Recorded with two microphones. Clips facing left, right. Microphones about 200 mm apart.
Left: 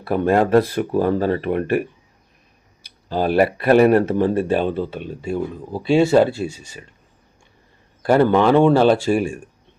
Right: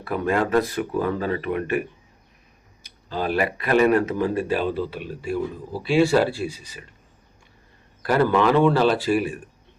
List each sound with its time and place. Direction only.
0.0 s speech: 35° left (ahead or behind)
2.8 s speech: 35° left (ahead or behind)
8.0 s speech: 30° left (ahead or behind)